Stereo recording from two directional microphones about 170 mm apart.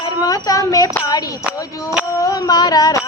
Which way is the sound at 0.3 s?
20° left (ahead or behind).